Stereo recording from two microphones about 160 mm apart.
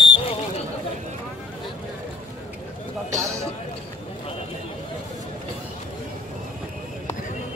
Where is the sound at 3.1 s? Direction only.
20° right (ahead or behind).